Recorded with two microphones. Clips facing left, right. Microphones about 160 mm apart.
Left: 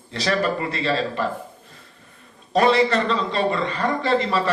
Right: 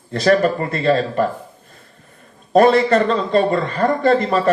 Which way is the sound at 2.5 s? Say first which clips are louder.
Right 5 dB; 50° right (ahead or behind).